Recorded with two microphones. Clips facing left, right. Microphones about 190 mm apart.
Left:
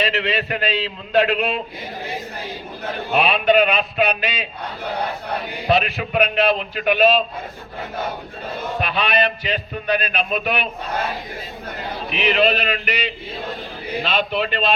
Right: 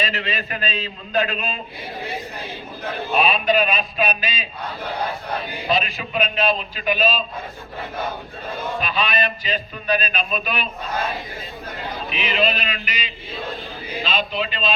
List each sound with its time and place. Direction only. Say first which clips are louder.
0.0 s a man's voice: left 5 dB; 65° left (ahead or behind)
3.1 s a man's voice: left 2 dB; 65° left (ahead or behind)
5.6 s a man's voice: left 5 dB; 65° left (ahead or behind)
8.8 s a man's voice: left 4 dB; 65° left (ahead or behind)
12.1 s a man's voice: left 5 dB; 60° left (ahead or behind)